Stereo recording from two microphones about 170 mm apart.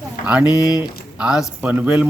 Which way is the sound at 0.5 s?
20° left (ahead or behind).